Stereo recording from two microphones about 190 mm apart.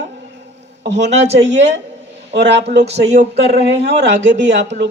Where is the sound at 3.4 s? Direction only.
60° right (ahead or behind).